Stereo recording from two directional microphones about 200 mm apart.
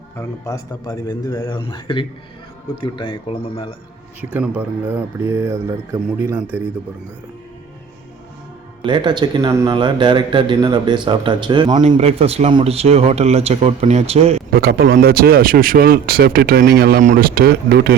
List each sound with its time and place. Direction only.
0.2 s speech: 15° left (ahead or behind)
4.2 s speech: 5° right (ahead or behind)
8.8 s speech: 25° right (ahead or behind)
14.5 s speech: 50° right (ahead or behind)